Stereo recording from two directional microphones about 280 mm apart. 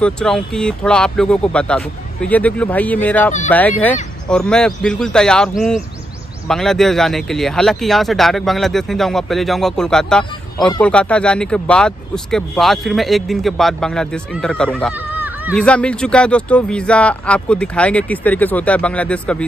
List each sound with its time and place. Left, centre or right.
0.0 s speech: centre
15.6 s speech: centre